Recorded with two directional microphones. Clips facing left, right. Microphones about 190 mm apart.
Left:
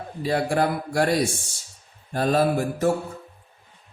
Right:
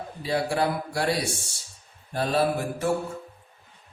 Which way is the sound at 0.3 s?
50° left (ahead or behind).